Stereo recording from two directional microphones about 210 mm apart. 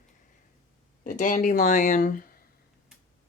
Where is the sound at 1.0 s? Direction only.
40° left (ahead or behind).